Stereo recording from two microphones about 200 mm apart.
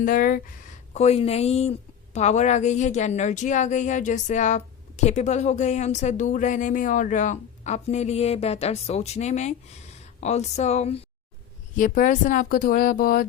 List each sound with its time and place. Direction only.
0.0 s speech: 45° left (ahead or behind)
0.9 s a woman's voice: 30° left (ahead or behind)